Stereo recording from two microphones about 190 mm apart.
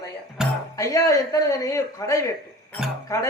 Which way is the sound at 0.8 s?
15° left (ahead or behind).